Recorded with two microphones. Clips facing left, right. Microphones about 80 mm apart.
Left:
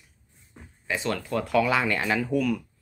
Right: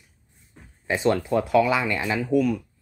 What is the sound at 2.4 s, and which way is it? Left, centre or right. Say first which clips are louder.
Speech: right 4 dB; centre.